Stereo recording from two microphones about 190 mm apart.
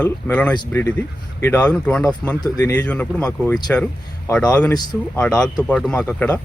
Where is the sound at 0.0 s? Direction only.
10° left (ahead or behind).